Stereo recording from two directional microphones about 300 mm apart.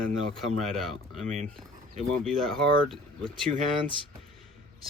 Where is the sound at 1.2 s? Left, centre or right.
Right.